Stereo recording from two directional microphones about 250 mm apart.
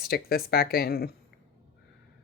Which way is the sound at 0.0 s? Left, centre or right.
Left.